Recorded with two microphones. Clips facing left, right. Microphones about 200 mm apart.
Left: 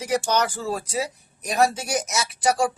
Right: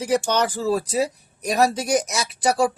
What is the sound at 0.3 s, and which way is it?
A man's voice, 35° right (ahead or behind).